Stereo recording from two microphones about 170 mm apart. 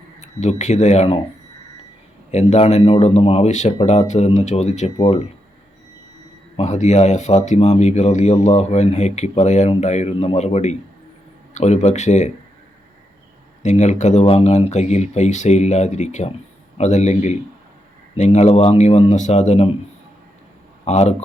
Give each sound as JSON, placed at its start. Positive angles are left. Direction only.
{"t": 0.2, "sound": "speech", "side_deg": 45}
{"t": 2.3, "sound": "speech", "side_deg": 40}
{"t": 6.6, "sound": "speech", "side_deg": 40}
{"t": 13.6, "sound": "speech", "side_deg": 45}
{"t": 20.8, "sound": "speech", "side_deg": 40}